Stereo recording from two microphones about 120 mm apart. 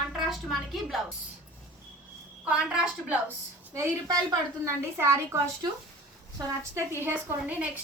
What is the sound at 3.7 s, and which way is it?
A woman's voice, 30° right (ahead or behind).